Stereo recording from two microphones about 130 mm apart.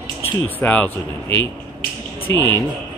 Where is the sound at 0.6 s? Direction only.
15° left (ahead or behind).